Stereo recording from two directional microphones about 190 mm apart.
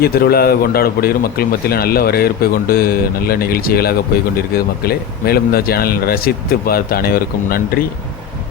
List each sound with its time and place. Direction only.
0.0 s a man's voice: 55° left (ahead or behind)